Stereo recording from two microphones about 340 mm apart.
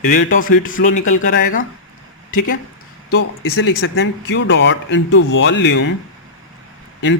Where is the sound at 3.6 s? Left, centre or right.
Left.